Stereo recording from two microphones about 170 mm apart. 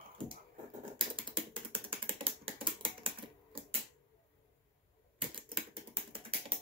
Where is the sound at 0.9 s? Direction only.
30° right (ahead or behind).